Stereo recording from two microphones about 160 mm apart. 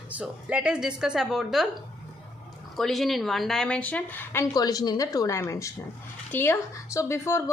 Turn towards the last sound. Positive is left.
turn(degrees=15)  # may be behind; listen again after turning